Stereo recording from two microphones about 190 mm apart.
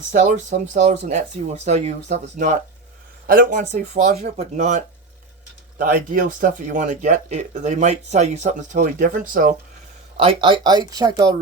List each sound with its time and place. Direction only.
0.1 s speech: 40° right (ahead or behind)
10.2 s speech: 25° right (ahead or behind)